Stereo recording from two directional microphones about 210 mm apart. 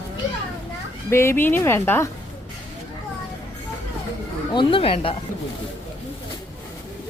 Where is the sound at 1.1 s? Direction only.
10° left (ahead or behind).